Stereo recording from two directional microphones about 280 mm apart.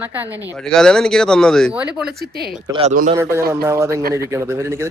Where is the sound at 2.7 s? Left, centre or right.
Right.